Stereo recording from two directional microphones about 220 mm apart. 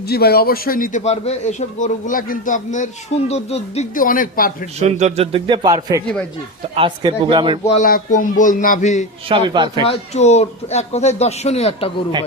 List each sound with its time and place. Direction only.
0.1 s a man's voice: 45° left (ahead or behind)
4.8 s a man's voice: 30° right (ahead or behind)
7.7 s a man's voice: 40° left (ahead or behind)
9.3 s a man's voice: 20° right (ahead or behind)
9.8 s speech: 30° left (ahead or behind)